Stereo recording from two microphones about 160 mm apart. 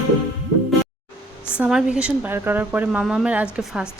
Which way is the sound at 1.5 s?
5° right (ahead or behind).